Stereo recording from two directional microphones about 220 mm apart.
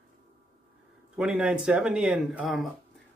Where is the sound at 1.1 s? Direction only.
5° right (ahead or behind).